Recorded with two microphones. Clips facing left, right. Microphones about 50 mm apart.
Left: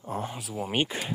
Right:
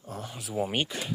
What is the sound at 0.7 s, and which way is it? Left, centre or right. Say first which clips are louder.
Speech: left 2 dB; left.